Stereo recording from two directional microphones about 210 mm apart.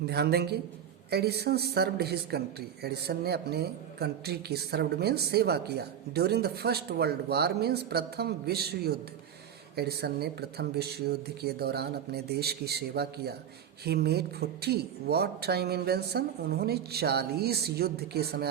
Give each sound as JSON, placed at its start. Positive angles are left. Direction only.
{"t": 0.0, "sound": "a man's voice", "side_deg": -50}